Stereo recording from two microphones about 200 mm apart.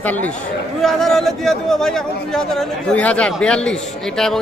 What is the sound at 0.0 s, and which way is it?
A man's voice, 10° left (ahead or behind).